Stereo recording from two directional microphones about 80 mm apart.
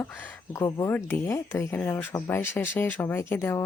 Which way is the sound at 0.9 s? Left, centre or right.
Left.